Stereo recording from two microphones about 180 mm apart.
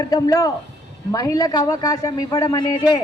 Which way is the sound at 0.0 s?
20° left (ahead or behind).